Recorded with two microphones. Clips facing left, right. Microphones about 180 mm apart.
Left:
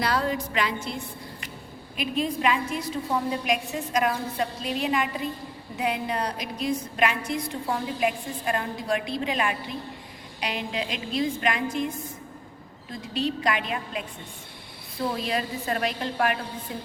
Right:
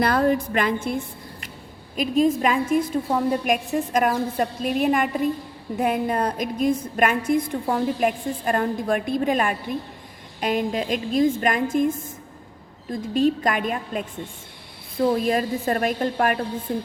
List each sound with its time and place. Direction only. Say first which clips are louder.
0.0 s a woman's voice: right 6 dB; 50° right (ahead or behind)
2.0 s a woman's voice: right 7 dB; 45° right (ahead or behind)
15.2 s a woman's voice: right 7 dB; 50° right (ahead or behind)